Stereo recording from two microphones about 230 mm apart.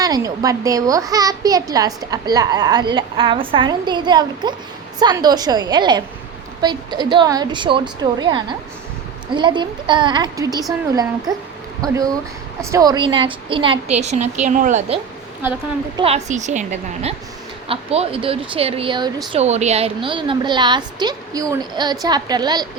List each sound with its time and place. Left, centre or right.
0.0 s a woman's voice: centre
11.8 s a woman's voice: centre
16.0 s a woman's voice: right
19.4 s a woman's voice: right